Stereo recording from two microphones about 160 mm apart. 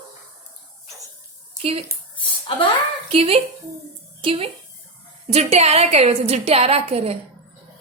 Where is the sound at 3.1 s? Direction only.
40° right (ahead or behind).